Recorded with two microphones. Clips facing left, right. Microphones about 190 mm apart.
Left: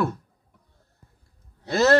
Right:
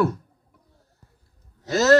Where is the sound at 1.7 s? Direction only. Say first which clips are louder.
Right 2 dB; 40° right (ahead or behind).